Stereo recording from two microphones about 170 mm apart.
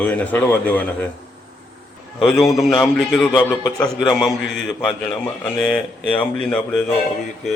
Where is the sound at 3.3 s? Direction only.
25° left (ahead or behind).